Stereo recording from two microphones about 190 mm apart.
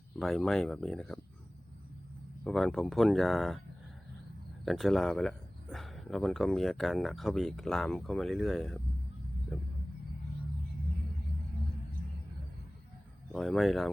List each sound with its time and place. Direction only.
0.2 s speech: centre (ahead or behind)
2.4 s speech: centre (ahead or behind)
4.6 s speech: centre (ahead or behind)
9.5 s rumble: centre (ahead or behind)
13.3 s speech: centre (ahead or behind)